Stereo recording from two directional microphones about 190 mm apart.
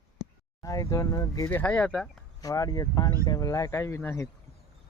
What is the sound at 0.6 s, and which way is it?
Speech, 15° left (ahead or behind).